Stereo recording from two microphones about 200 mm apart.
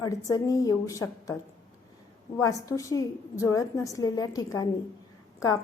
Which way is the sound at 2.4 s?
15° left (ahead or behind).